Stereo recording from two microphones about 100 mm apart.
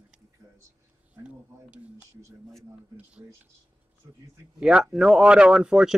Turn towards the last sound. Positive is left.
turn(degrees=-5)  # may be behind; listen again after turning